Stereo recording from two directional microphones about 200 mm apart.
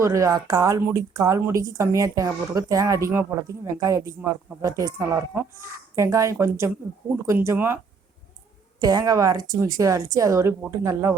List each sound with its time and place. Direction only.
0.0 s a woman's voice: 15° right (ahead or behind)
8.8 s a woman's voice: 20° right (ahead or behind)